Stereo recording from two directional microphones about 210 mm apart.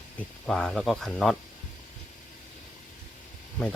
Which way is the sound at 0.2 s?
5° left (ahead or behind).